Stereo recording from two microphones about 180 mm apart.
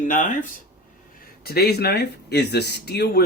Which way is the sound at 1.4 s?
60° left (ahead or behind).